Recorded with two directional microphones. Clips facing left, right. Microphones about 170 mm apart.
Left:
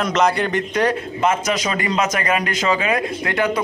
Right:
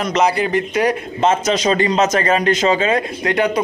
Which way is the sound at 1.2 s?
25° right (ahead or behind).